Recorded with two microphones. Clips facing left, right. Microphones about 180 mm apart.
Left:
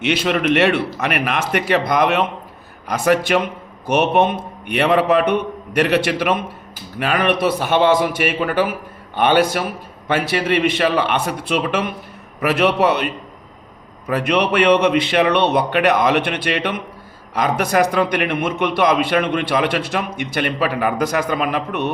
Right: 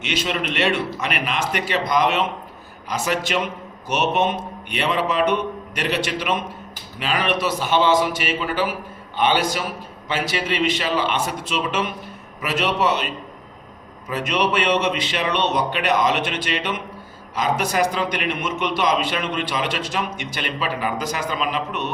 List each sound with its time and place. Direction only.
0.0 s a man's voice: 60° left (ahead or behind)
14.1 s a man's voice: 60° left (ahead or behind)